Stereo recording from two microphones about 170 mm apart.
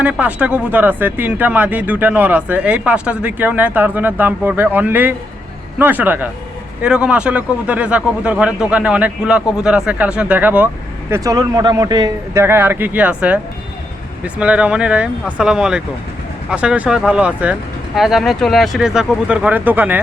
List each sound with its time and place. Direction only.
0.0 s speech: 10° right (ahead or behind)
11.1 s speech: 20° right (ahead or behind)